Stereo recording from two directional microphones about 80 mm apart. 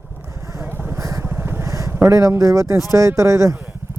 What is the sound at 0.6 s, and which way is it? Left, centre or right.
Vehicle, right.